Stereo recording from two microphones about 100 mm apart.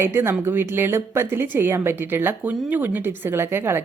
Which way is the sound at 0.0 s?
20° right (ahead or behind).